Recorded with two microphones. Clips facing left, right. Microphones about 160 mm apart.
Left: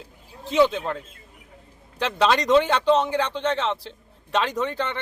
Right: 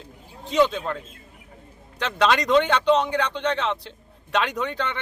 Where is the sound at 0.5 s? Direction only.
5° left (ahead or behind).